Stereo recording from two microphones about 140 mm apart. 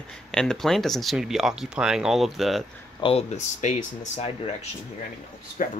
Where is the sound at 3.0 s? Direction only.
40° left (ahead or behind).